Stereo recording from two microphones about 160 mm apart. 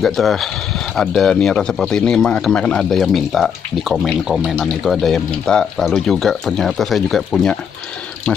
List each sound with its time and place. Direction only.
0.0 s a man's voice: centre (ahead or behind)